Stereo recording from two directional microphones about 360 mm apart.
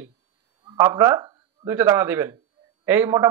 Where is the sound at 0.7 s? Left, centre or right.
Centre.